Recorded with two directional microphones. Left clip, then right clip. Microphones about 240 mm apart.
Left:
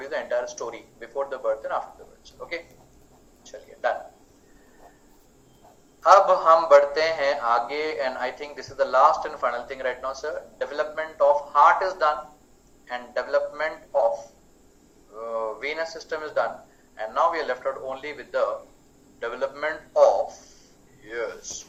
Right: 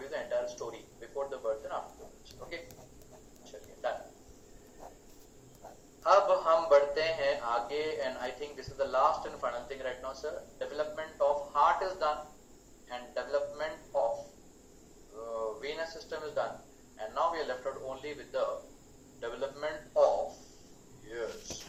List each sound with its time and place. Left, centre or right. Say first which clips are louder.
0.1 s speech: left 7 dB; left
3.4 s a sound: left 10 dB; left
6.0 s a man's voice: left 9 dB; left